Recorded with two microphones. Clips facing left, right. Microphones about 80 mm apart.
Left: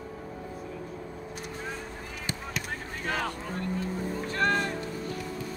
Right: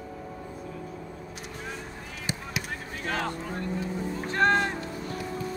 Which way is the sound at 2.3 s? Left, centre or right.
Centre.